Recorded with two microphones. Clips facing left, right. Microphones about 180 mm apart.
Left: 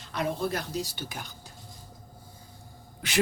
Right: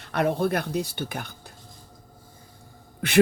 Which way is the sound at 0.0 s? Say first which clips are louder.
Right 6 dB; 60° right (ahead or behind).